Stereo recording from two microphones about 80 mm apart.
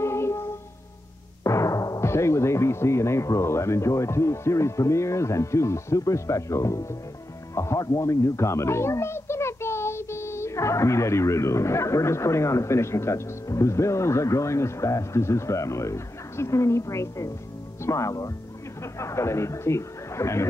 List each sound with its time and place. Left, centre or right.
0.0 s music: left
1.4 s a child's voice: left